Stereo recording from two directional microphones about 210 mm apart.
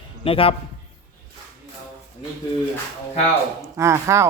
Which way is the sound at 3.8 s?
15° right (ahead or behind).